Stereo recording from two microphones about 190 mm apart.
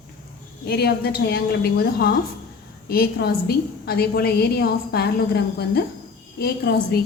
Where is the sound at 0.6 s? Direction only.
55° left (ahead or behind).